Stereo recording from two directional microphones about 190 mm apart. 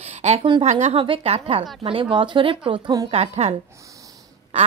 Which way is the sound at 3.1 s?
35° right (ahead or behind).